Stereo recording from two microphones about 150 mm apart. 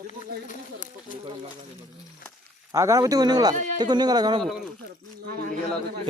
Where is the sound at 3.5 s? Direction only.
50° right (ahead or behind).